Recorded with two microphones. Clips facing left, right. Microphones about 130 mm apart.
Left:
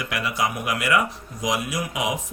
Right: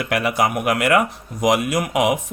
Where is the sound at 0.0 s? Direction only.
60° right (ahead or behind).